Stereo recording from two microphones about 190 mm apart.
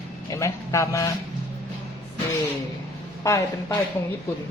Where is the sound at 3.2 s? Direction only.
15° left (ahead or behind).